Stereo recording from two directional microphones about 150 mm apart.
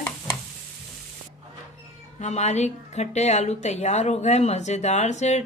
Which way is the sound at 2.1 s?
50° left (ahead or behind).